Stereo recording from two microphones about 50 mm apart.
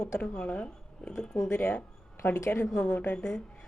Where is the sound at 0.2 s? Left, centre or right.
Left.